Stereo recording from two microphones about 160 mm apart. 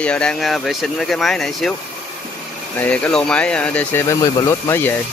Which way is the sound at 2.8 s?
10° left (ahead or behind).